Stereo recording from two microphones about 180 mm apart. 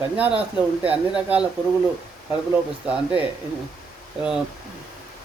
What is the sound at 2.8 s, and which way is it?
Speech, 5° right (ahead or behind).